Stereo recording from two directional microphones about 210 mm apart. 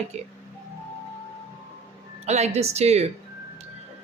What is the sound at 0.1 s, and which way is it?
Speech, 30° right (ahead or behind).